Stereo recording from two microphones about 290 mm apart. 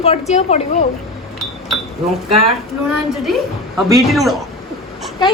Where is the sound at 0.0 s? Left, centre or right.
Left.